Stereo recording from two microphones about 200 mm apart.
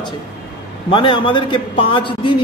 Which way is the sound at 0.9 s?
25° left (ahead or behind).